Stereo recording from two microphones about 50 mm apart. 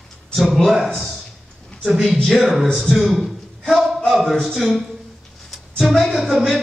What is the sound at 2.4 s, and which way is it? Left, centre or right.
A man's voice, centre.